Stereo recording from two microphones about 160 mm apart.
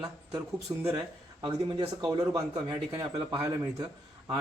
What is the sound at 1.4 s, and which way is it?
A man's voice, 25° right (ahead or behind).